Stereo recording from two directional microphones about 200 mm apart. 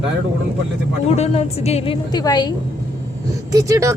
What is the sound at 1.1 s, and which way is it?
Speech, 30° left (ahead or behind).